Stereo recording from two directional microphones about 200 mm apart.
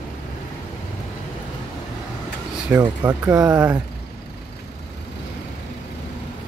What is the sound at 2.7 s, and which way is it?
Speech, 15° right (ahead or behind).